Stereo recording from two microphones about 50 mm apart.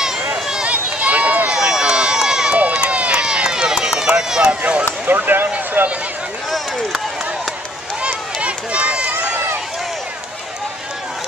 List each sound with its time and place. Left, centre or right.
0.7 s run: right
1.6 s run: centre
2.5 s run: right
5.0 s a sound: right
5.8 s run: right
8.0 s run: right